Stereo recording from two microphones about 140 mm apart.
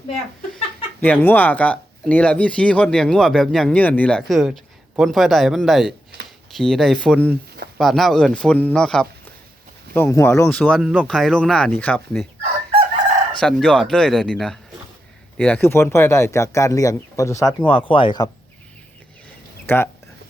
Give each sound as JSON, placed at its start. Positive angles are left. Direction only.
{"t": 1.0, "sound": "speech", "side_deg": 15}
{"t": 4.2, "sound": "a man's voice", "side_deg": 0}
{"t": 9.9, "sound": "a man's voice", "side_deg": 20}
{"t": 13.4, "sound": "a man's voice", "side_deg": 5}
{"t": 17.7, "sound": "speech", "side_deg": 35}
{"t": 19.6, "sound": "speech", "side_deg": 15}